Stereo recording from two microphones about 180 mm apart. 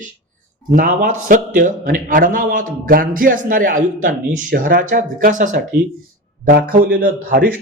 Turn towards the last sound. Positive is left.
turn(degrees=-50)  # may be behind; listen again after turning